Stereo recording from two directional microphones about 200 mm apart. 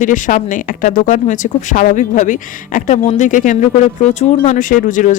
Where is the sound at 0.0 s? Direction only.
40° left (ahead or behind).